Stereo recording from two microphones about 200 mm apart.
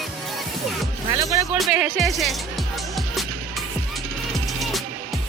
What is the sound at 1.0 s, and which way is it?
Music, 15° right (ahead or behind).